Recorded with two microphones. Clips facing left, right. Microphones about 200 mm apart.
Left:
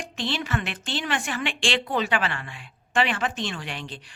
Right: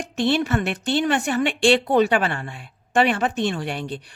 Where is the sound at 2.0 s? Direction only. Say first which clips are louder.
Right 5 dB; 45° right (ahead or behind).